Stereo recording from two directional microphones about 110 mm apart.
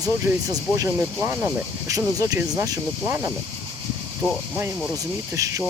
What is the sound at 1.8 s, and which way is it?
Speech, 35° right (ahead or behind).